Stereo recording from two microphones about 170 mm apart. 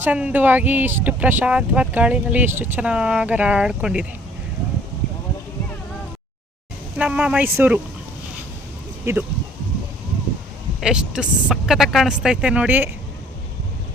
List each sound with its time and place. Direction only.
0.0 s speech: 10° right (ahead or behind)
7.0 s speech: 10° right (ahead or behind)
9.1 s speech: 15° right (ahead or behind)
10.8 s speech: 5° right (ahead or behind)